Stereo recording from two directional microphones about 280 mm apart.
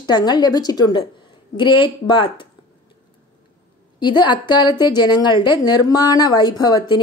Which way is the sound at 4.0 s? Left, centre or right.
Centre.